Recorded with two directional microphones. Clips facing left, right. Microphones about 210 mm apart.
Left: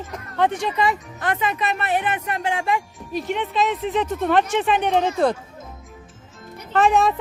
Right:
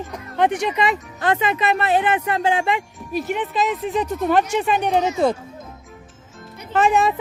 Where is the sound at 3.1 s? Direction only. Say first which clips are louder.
Right 1 dB; 5° right (ahead or behind).